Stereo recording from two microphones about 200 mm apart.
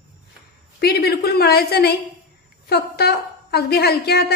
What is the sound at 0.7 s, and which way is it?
A woman's voice, 55° left (ahead or behind).